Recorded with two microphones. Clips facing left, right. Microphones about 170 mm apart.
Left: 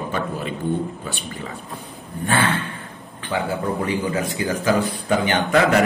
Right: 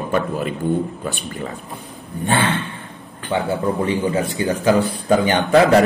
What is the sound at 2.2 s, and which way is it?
Speech, 20° right (ahead or behind).